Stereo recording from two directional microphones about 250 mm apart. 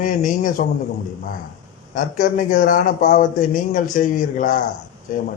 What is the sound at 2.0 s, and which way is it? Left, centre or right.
Speech, left.